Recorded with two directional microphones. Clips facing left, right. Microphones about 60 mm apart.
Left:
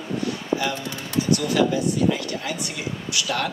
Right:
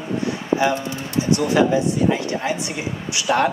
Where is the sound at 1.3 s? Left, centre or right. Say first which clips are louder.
Right 4 dB; right.